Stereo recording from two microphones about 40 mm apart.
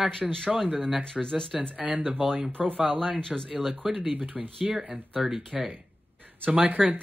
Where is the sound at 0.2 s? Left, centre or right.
Centre.